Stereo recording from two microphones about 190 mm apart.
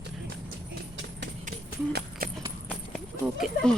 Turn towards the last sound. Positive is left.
turn(degrees=0)  # may be behind; listen again after turning